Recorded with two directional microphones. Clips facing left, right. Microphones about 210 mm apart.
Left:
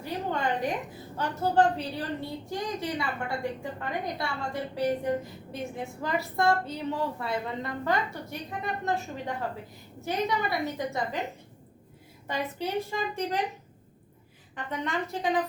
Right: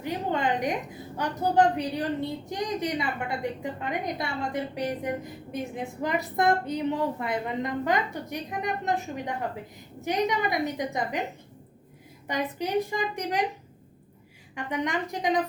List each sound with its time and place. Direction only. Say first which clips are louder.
0.0 s a woman's voice: right 2 dB; 20° right (ahead or behind)
12.3 s a woman's voice: right 3 dB; 15° right (ahead or behind)
14.5 s a woman's voice: right 3 dB; 15° right (ahead or behind)